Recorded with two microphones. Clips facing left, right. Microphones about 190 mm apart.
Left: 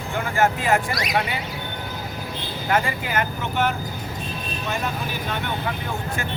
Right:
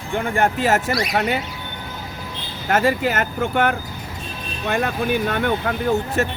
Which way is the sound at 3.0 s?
50° right (ahead or behind).